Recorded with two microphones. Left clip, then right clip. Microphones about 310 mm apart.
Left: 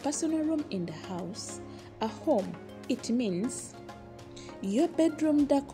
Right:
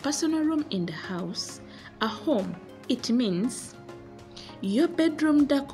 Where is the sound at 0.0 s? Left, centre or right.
Centre.